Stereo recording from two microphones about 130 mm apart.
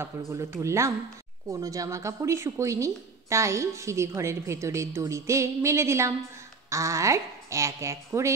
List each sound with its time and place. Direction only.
0.3 s a woman's voice: 25° right (ahead or behind)